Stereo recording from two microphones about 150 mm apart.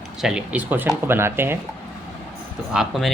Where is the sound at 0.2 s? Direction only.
5° right (ahead or behind).